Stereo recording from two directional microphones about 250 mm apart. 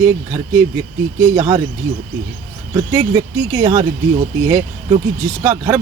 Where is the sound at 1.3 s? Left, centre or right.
Centre.